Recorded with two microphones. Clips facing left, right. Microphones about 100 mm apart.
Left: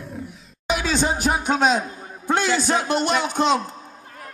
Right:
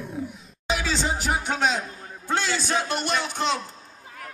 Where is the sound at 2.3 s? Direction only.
15° left (ahead or behind).